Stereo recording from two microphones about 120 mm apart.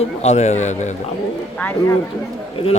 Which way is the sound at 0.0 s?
65° left (ahead or behind).